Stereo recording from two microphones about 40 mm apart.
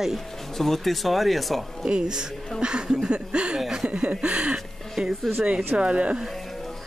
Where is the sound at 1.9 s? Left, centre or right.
Right.